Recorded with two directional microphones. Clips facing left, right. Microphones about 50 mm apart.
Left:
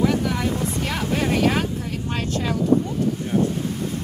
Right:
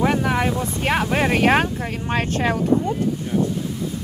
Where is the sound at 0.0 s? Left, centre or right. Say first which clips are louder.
Right 2 dB; right.